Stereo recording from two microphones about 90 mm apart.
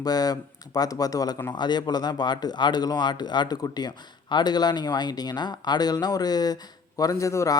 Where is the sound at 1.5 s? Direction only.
55° left (ahead or behind).